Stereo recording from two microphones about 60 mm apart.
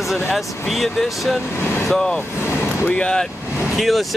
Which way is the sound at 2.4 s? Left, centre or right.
Left.